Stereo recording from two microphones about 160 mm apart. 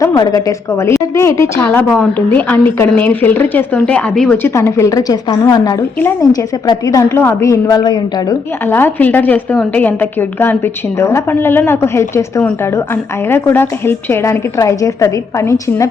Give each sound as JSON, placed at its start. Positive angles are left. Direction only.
{"t": 0.0, "sound": "a woman's voice", "side_deg": 20}
{"t": 6.0, "sound": "a woman's voice", "side_deg": 15}
{"t": 8.6, "sound": "a woman's voice", "side_deg": 15}